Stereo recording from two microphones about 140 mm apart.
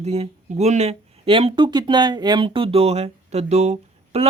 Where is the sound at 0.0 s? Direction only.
50° right (ahead or behind).